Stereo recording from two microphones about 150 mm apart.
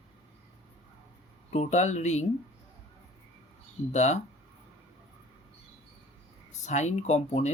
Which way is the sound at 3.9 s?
50° left (ahead or behind).